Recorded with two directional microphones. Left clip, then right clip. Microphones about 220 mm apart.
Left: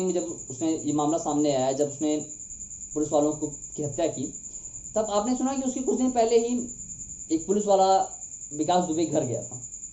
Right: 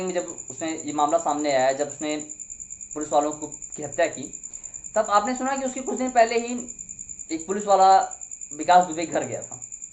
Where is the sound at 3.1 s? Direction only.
20° right (ahead or behind).